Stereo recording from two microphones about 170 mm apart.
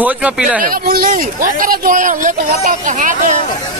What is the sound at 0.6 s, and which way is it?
Speech, 55° right (ahead or behind).